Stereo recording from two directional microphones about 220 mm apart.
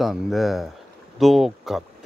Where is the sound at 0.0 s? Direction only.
Centre (ahead or behind).